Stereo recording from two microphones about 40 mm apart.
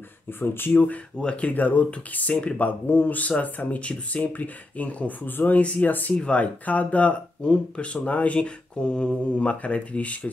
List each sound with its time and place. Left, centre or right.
0.4 s speech: left
1.2 s speech: left
1.5 s speech: left
5.6 s speech: left
5.9 s speech: left
6.2 s speech: left
7.4 s speech: left
8.4 s speech: left